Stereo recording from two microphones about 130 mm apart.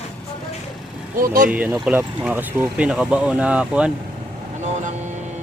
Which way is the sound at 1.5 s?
10° right (ahead or behind).